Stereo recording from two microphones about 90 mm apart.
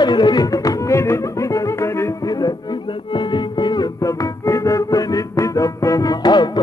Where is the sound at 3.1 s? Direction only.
60° left (ahead or behind).